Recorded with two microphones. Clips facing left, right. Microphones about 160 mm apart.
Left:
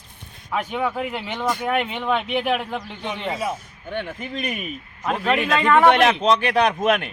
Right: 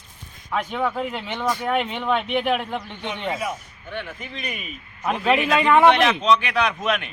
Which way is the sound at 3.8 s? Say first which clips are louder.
Left 4 dB; 45° left (ahead or behind).